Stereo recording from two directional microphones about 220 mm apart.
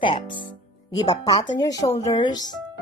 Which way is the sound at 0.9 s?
15° left (ahead or behind).